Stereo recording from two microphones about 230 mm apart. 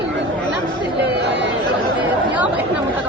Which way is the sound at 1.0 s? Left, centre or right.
Right.